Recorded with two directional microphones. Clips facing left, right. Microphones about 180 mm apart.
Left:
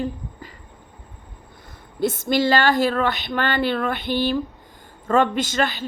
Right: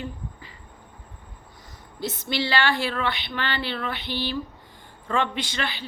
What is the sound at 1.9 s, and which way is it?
Speech, 50° left (ahead or behind).